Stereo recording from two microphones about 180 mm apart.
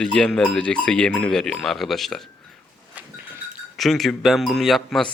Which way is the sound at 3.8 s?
Centre (ahead or behind).